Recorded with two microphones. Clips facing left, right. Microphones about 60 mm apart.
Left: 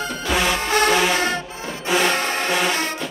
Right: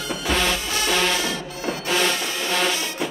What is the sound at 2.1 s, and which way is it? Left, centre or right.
Music, left.